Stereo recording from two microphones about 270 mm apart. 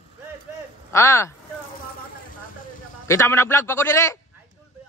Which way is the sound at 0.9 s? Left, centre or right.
Centre.